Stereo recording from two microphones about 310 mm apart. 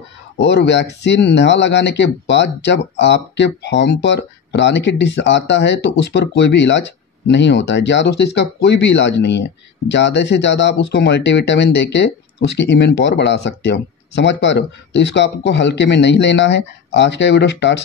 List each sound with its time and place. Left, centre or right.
0.4 s speech: left